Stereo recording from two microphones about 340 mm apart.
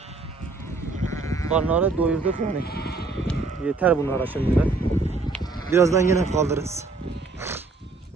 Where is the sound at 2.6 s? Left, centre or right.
Left.